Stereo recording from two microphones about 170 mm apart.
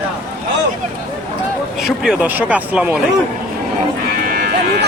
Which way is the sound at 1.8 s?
5° right (ahead or behind).